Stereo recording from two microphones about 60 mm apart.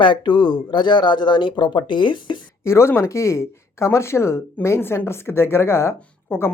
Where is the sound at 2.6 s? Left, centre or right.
Left.